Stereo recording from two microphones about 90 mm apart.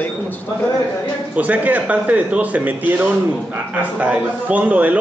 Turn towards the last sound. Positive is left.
turn(degrees=-15)  # may be behind; listen again after turning